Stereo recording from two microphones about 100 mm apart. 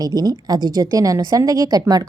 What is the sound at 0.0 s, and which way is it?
A woman's voice, 40° right (ahead or behind).